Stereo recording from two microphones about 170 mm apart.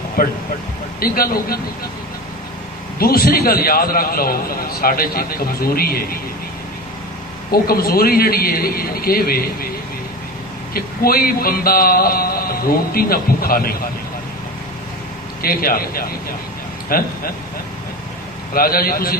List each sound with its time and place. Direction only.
0.2 s a man's voice: 60° left (ahead or behind)
3.0 s a man's voice: 60° left (ahead or behind)
7.5 s a man's voice: 60° left (ahead or behind)
10.8 s a man's voice: 60° left (ahead or behind)
15.4 s a man's voice: 60° left (ahead or behind)
18.5 s a man's voice: 60° left (ahead or behind)